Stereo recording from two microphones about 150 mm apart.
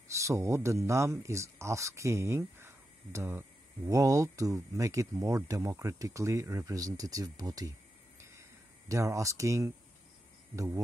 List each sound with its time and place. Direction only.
0.1 s speech: 20° right (ahead or behind)
8.2 s a sound: 20° right (ahead or behind)
10.5 s speech: 20° right (ahead or behind)